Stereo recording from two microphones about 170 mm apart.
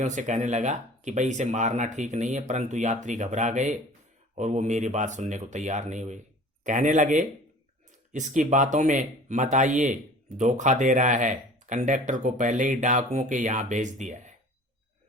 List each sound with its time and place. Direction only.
0.0 s speech: 45° right (ahead or behind)